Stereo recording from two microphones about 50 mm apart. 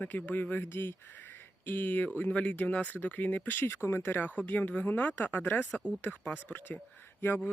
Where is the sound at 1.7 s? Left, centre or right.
Left.